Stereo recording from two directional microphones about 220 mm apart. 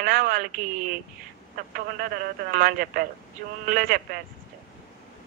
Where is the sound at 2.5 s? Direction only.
40° right (ahead or behind).